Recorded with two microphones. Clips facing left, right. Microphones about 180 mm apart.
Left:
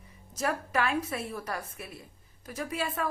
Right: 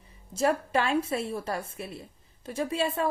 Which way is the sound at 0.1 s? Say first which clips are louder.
Right 6 dB; 30° right (ahead or behind).